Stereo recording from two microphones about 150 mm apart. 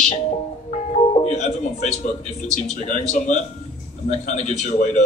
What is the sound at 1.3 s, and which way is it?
Speech, 50° left (ahead or behind).